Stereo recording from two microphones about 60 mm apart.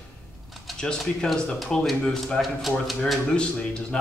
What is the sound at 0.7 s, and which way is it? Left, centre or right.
Speech, centre.